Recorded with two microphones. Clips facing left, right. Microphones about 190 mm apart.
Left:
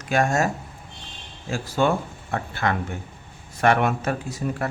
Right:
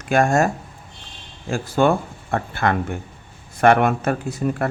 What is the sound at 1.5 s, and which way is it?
Speech, 50° right (ahead or behind).